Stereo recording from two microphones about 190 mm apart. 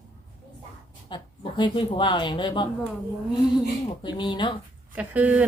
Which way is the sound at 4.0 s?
25° left (ahead or behind).